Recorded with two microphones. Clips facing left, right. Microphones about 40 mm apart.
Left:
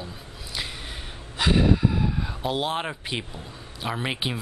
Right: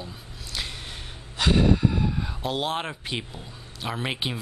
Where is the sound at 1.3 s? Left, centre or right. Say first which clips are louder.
Even; centre.